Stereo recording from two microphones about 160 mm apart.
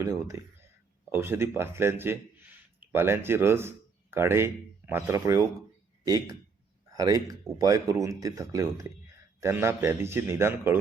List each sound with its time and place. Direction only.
0.0 s a man's voice: 20° right (ahead or behind)
6.9 s a man's voice: 25° right (ahead or behind)